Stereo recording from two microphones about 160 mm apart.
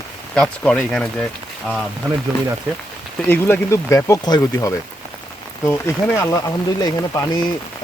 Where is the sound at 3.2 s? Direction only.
10° left (ahead or behind).